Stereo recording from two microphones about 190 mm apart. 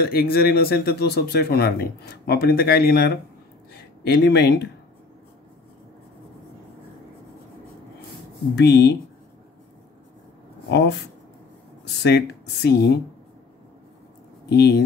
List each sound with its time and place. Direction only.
0.0 s speech: 55° left (ahead or behind)
8.5 s speech: 65° left (ahead or behind)
10.7 s speech: 65° left (ahead or behind)
14.5 s speech: 60° left (ahead or behind)